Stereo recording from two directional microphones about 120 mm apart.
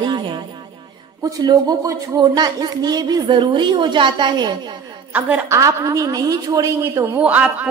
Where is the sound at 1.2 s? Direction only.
30° right (ahead or behind).